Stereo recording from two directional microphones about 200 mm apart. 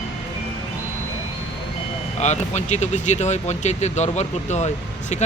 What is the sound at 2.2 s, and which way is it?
Speech, 35° left (ahead or behind).